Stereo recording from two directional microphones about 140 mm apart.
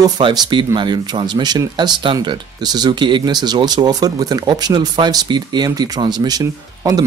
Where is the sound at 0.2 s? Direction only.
30° right (ahead or behind).